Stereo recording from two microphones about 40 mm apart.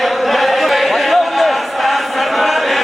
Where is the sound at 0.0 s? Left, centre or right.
Centre.